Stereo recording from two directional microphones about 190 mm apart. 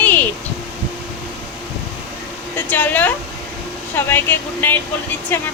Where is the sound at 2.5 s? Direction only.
10° left (ahead or behind).